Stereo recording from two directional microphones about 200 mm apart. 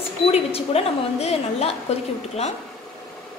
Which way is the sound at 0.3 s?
30° left (ahead or behind).